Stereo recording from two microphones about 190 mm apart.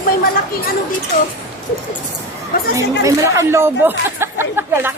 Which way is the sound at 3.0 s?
15° right (ahead or behind).